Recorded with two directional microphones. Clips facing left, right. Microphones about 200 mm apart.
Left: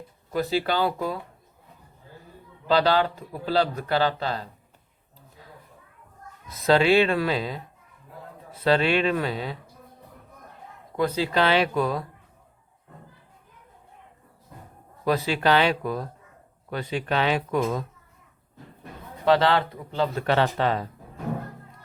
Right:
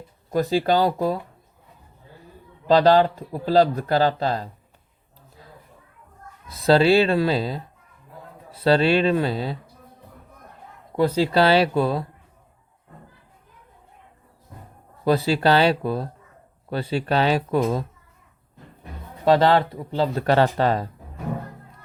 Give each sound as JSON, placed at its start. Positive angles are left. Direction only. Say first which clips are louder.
{"t": 0.3, "sound": "speech", "louder": "right 5 dB", "side_deg": -40}
{"t": 2.6, "sound": "speech", "louder": "right 5 dB", "side_deg": -40}
{"t": 6.5, "sound": "speech", "louder": "right 3 dB", "side_deg": -30}
{"t": 10.9, "sound": "speech", "louder": "right 5 dB", "side_deg": -35}
{"t": 15.0, "sound": "speech", "louder": "right 4 dB", "side_deg": -30}
{"t": 19.3, "sound": "speech", "louder": "right 3 dB", "side_deg": -40}